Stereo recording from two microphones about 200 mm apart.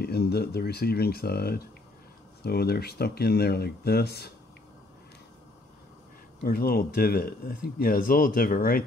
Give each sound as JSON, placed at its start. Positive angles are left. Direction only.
{"t": 0.0, "sound": "speech", "side_deg": 55}
{"t": 6.4, "sound": "speech", "side_deg": 50}